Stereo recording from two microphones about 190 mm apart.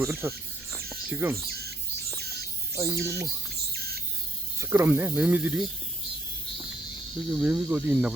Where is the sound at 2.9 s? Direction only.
60° right (ahead or behind).